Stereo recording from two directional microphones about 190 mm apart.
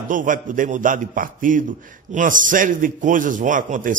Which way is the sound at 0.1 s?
45° right (ahead or behind).